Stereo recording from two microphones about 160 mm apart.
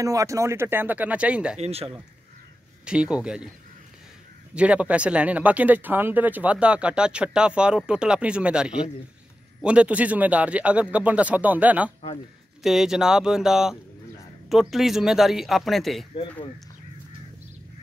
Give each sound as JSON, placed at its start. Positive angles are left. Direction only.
{"t": 0.0, "sound": "speech", "side_deg": -20}
{"t": 1.6, "sound": "speech", "side_deg": -40}
{"t": 2.8, "sound": "speech", "side_deg": -5}
{"t": 4.6, "sound": "speech", "side_deg": -10}